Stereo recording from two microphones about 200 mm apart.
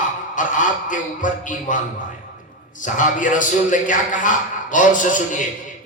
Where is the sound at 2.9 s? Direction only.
40° left (ahead or behind).